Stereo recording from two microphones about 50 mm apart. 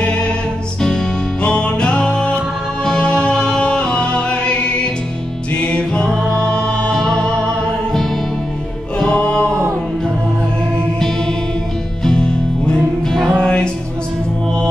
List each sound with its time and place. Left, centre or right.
0.8 s music: centre
9.0 s music: centre
12.0 s music: centre